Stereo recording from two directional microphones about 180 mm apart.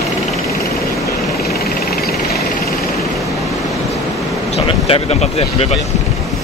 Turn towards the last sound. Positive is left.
turn(degrees=35)  # may be behind; listen again after turning